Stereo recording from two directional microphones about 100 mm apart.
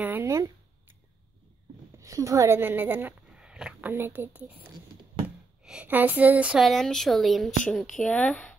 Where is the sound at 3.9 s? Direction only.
20° right (ahead or behind).